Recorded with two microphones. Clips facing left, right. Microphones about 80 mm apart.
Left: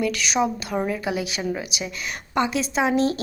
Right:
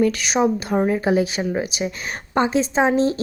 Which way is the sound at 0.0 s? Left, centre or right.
Right.